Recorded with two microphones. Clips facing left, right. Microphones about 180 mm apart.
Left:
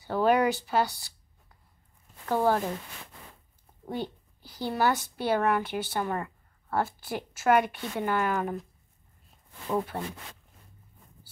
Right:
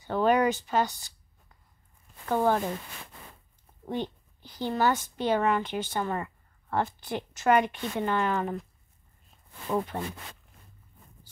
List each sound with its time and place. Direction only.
0.0 s speech: 10° left (ahead or behind)
2.2 s speech: 5° left (ahead or behind)
3.8 s a woman's voice: 10° left (ahead or behind)
9.7 s speech: 5° left (ahead or behind)